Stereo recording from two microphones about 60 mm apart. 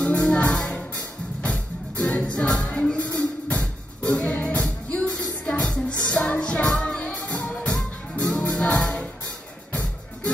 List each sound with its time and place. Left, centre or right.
0.0 s music: left